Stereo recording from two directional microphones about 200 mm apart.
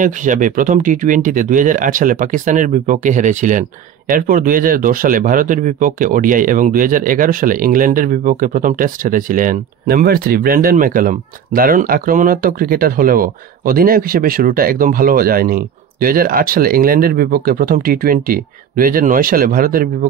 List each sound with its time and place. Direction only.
0.0 s speech: 40° right (ahead or behind)